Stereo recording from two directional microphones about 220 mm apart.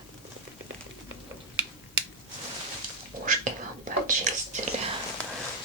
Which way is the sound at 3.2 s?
35° right (ahead or behind).